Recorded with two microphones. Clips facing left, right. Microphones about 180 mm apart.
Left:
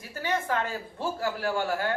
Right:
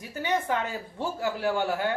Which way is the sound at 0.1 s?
20° right (ahead or behind).